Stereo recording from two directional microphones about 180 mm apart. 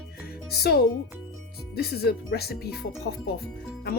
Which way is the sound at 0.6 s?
65° left (ahead or behind).